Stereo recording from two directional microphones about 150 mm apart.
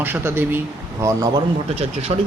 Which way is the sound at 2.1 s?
40° right (ahead or behind).